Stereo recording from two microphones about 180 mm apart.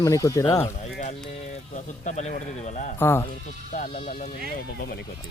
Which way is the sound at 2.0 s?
40° left (ahead or behind).